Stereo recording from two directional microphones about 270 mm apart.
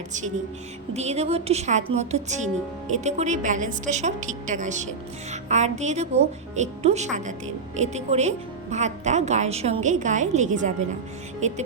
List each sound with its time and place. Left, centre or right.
0.9 s a woman's voice: right